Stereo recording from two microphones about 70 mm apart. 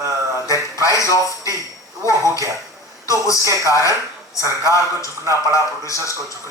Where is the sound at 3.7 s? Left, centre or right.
Left.